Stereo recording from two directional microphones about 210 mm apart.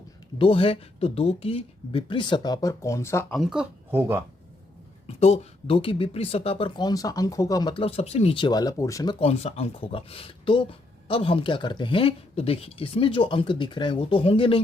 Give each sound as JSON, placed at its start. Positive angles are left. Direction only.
{"t": 0.3, "sound": "speech", "side_deg": 25}
{"t": 3.3, "sound": "speech", "side_deg": 0}
{"t": 5.0, "sound": "speech", "side_deg": 30}